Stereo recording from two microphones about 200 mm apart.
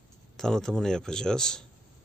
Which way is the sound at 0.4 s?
5° left (ahead or behind).